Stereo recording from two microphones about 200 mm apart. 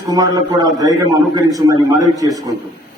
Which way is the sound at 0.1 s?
20° right (ahead or behind).